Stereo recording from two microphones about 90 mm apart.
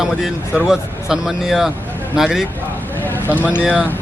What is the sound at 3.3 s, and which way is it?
Speech, 20° left (ahead or behind).